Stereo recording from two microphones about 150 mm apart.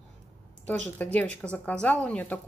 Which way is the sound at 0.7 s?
10° left (ahead or behind).